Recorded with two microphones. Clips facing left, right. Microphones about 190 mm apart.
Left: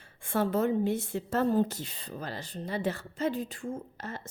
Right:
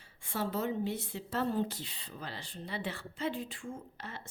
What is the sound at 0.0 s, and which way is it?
A woman's voice, 55° left (ahead or behind).